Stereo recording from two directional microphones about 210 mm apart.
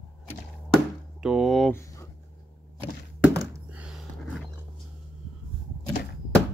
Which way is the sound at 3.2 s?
5° right (ahead or behind).